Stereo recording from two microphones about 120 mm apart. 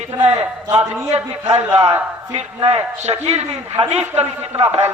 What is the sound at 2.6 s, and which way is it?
A man's voice, 60° right (ahead or behind).